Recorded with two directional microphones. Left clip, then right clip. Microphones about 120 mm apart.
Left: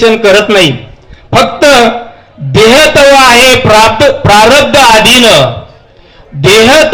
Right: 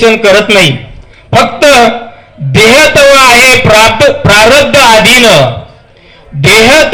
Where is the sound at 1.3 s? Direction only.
50° left (ahead or behind).